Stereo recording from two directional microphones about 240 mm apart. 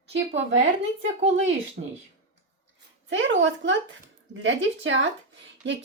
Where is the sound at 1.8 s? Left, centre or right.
Right.